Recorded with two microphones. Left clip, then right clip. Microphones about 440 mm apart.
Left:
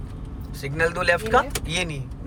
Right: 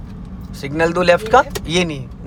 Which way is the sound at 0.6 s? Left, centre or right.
Centre.